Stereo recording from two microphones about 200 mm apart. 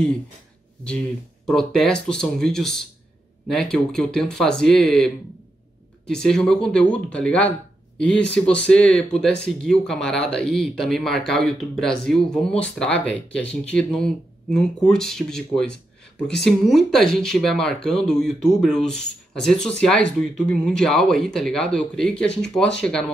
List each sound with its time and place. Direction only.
0.8 s speech: 5° left (ahead or behind)